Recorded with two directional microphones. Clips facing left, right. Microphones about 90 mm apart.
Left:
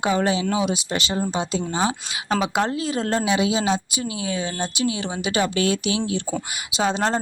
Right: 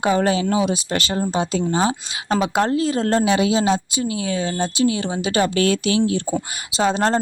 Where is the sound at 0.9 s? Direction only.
50° right (ahead or behind).